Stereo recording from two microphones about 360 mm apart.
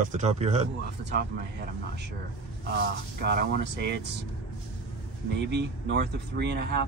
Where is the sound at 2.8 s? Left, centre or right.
Right.